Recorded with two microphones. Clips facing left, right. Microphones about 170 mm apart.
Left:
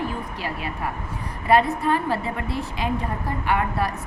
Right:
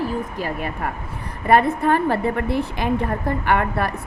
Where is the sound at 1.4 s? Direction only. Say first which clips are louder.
Right 3 dB; 55° right (ahead or behind).